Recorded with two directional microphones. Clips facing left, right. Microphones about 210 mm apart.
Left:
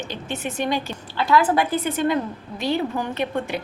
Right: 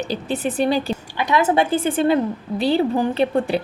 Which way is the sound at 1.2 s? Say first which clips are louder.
Right 1 dB; 20° right (ahead or behind).